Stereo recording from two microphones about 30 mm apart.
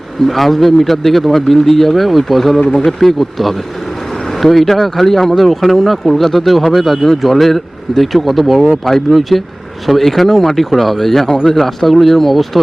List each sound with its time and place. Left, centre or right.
0.3 s speech: centre
2.6 s speech: centre
3.0 s speech: centre
4.3 s vehicle: centre
4.6 s speech: centre